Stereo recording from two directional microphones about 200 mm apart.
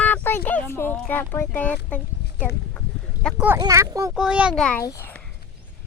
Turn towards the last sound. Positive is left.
turn(degrees=10)  # may be behind; listen again after turning